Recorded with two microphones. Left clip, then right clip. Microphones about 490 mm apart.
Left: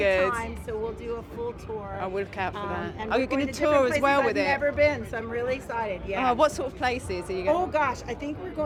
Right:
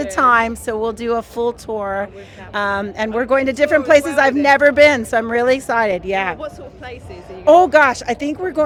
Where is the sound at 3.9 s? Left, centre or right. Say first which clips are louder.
Right 10 dB; right.